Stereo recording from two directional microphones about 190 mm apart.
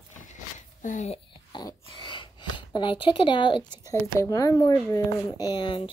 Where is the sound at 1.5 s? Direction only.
25° left (ahead or behind).